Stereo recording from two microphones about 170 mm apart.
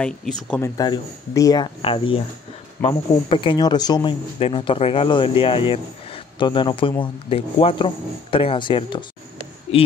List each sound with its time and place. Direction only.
0.0 s speech: 5° left (ahead or behind)
0.6 s speech: 25° left (ahead or behind)